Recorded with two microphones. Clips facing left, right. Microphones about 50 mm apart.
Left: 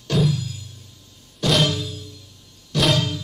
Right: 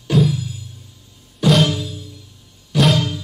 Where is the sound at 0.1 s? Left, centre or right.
Centre.